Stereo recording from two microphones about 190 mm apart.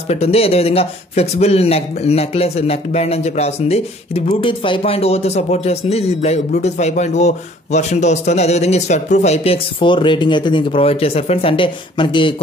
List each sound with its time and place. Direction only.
0.1 s speech: 30° left (ahead or behind)